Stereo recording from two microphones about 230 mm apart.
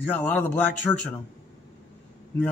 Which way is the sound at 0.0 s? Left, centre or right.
Centre.